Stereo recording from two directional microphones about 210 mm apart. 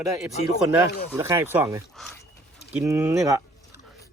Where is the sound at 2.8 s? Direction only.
10° right (ahead or behind).